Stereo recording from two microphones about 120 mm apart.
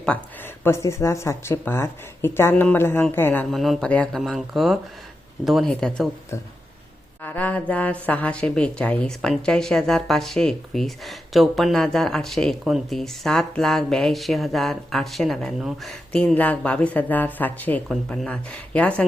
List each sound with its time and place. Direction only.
0.0 s speech: 15° left (ahead or behind)
3.5 s a woman's voice: centre (ahead or behind)
4.2 s a woman's voice: centre (ahead or behind)
7.2 s mantra: 15° left (ahead or behind)
8.0 s a woman's voice: 10° left (ahead or behind)